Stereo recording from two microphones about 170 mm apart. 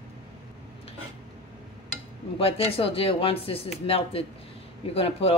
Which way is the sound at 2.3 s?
35° left (ahead or behind).